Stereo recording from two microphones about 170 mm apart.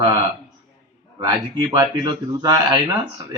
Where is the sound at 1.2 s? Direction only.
20° right (ahead or behind).